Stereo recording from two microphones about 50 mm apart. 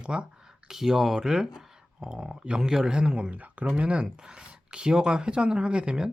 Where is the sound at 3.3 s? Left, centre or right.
Right.